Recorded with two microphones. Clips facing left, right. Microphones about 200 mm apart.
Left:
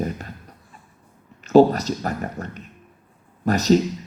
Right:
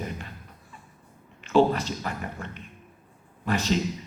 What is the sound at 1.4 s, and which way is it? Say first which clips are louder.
Speech: left 7 dB; 40° left (ahead or behind).